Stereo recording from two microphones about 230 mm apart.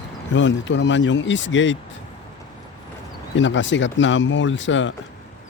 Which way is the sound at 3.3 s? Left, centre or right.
Left.